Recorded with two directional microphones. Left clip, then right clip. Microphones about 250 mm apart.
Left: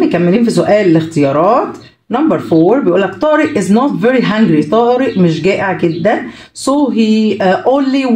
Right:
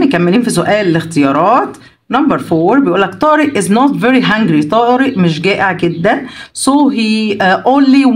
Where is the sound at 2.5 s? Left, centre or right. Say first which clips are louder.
Left 4 dB; right.